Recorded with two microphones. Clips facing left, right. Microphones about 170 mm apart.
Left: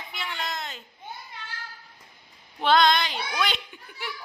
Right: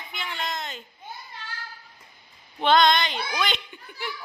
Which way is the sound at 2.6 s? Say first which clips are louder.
Right 1 dB; centre (ahead or behind).